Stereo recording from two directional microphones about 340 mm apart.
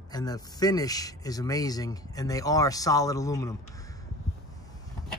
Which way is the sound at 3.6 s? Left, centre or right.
Centre.